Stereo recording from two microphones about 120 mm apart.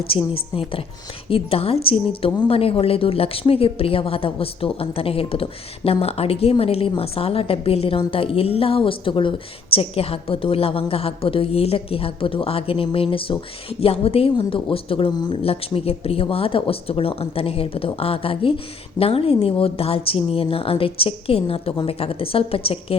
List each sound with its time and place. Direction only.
0.1 s a woman's voice: 50° left (ahead or behind)
15.4 s a woman's voice: 55° left (ahead or behind)